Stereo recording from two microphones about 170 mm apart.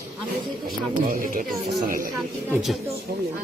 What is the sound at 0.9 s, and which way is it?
Speech, 55° right (ahead or behind).